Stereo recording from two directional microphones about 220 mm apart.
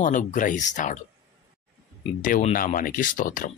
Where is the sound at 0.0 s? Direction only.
35° left (ahead or behind).